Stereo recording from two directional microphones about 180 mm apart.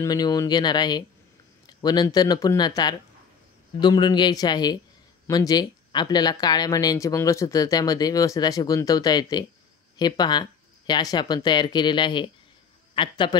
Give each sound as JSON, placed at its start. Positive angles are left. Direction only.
{"t": 0.0, "sound": "speech", "side_deg": 20}